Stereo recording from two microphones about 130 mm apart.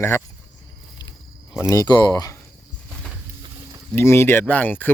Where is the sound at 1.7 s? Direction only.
30° left (ahead or behind).